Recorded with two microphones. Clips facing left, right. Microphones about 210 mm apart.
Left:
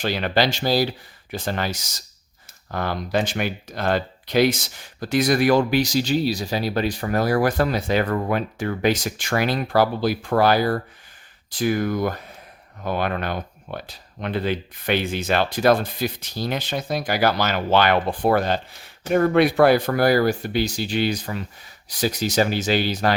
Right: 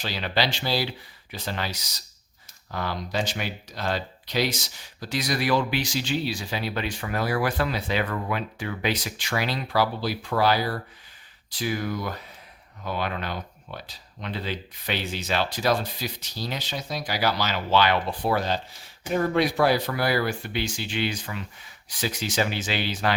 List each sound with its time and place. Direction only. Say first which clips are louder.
0.0 s speech: left 6 dB; 50° left (ahead or behind)